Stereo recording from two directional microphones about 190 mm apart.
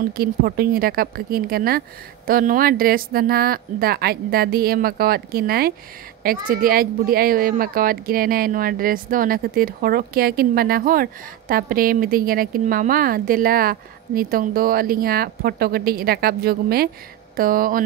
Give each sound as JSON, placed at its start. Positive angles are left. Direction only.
{"t": 0.1, "sound": "speech", "side_deg": -55}